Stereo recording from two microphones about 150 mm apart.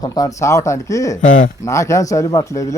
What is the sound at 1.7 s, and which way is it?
Speech, 20° left (ahead or behind).